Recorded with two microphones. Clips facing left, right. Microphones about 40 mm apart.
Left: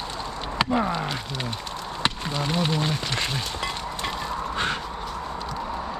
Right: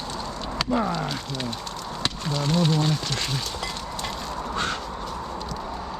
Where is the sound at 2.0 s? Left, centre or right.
Centre.